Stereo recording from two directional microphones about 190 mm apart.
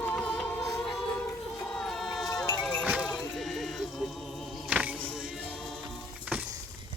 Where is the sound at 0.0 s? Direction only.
5° left (ahead or behind).